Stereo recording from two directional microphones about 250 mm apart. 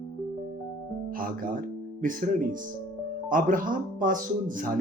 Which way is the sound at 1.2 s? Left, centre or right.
Right.